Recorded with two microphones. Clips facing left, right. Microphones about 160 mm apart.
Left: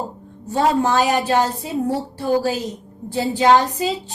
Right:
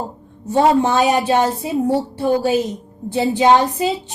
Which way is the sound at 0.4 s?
20° right (ahead or behind).